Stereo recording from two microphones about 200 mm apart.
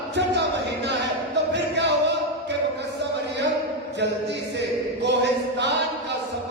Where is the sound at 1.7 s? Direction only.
60° right (ahead or behind).